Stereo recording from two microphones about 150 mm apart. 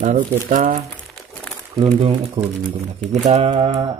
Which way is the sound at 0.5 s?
60° right (ahead or behind).